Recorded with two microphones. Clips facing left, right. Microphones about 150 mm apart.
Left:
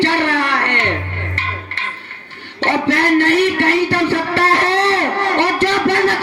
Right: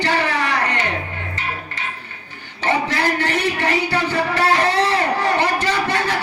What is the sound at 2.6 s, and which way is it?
Music, 65° left (ahead or behind).